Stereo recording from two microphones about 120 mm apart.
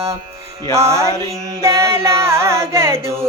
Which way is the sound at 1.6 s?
25° right (ahead or behind).